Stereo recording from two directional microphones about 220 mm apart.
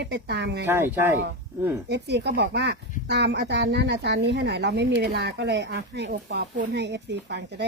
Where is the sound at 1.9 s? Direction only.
50° right (ahead or behind).